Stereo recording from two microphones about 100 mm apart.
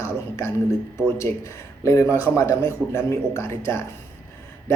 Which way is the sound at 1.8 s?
30° left (ahead or behind).